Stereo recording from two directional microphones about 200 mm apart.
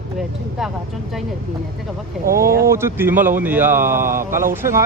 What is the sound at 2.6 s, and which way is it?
Speech, 15° right (ahead or behind).